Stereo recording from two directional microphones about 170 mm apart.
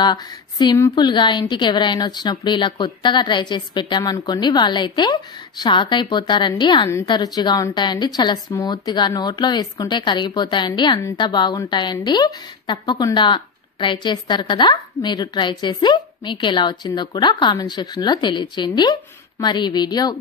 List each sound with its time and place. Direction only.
0.0 s a woman's voice: 25° left (ahead or behind)